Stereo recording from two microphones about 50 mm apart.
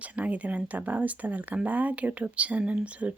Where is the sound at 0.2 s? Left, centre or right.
Right.